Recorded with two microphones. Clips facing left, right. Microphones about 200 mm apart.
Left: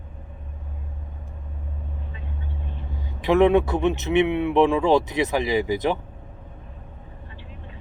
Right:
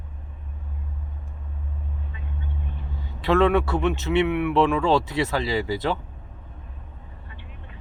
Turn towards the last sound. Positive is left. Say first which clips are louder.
# left 3 dB
turn(degrees=20)  # may be behind; listen again after turning